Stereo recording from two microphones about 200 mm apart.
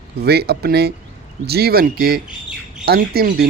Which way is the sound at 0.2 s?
55° right (ahead or behind).